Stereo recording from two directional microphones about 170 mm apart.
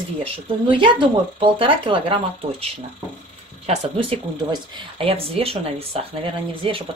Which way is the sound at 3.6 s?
40° right (ahead or behind).